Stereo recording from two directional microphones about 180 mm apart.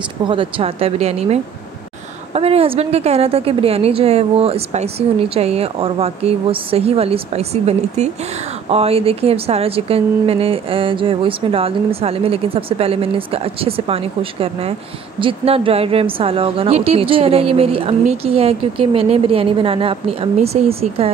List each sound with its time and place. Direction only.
0.3 s a woman's voice: 30° right (ahead or behind)